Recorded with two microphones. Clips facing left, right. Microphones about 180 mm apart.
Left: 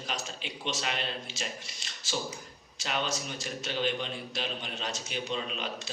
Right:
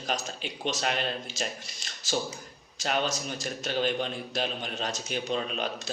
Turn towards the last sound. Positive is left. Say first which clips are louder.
# right 4 dB
turn(degrees=-45)  # may be behind; listen again after turning